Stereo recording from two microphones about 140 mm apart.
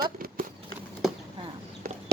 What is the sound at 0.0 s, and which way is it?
Horse, 90° right.